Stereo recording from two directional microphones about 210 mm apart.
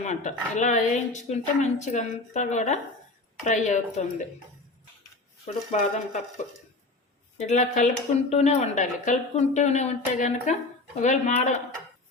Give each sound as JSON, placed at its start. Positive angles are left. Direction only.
{"t": 0.0, "sound": "speech", "side_deg": 35}
{"t": 5.7, "sound": "speech", "side_deg": 35}